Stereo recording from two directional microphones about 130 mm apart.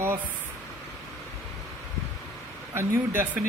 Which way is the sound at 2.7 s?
20° right (ahead or behind).